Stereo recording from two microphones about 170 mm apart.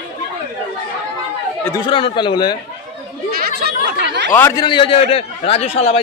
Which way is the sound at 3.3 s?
65° right (ahead or behind).